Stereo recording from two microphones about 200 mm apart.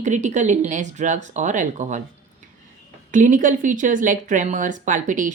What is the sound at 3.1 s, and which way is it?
A woman's voice, 40° right (ahead or behind).